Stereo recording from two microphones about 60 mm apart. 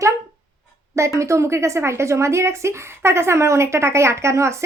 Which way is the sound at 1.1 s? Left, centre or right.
Right.